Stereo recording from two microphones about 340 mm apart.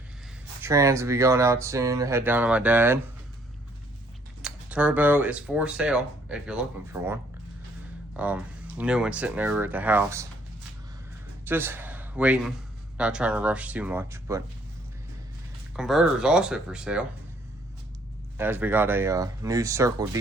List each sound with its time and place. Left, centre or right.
0.6 s speech: centre
4.4 s speech: centre
11.4 s a man's voice: centre
15.7 s speech: centre
18.3 s speech: centre